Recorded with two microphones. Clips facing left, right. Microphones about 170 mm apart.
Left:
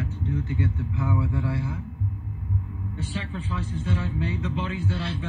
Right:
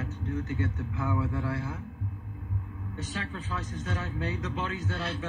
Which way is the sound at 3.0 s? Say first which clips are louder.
Left 3 dB; 30° left (ahead or behind).